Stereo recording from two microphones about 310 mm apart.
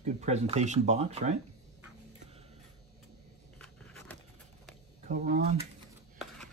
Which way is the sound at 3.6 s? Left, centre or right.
Centre.